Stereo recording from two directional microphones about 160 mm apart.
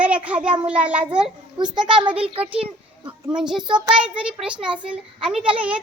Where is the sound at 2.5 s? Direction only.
35° right (ahead or behind).